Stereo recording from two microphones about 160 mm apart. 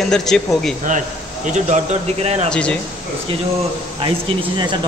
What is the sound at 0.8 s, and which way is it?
Speech, 50° right (ahead or behind).